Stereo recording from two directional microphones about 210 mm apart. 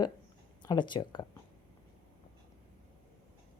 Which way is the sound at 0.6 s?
20° left (ahead or behind).